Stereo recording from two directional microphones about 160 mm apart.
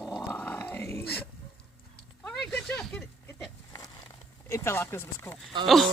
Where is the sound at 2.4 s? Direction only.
10° left (ahead or behind).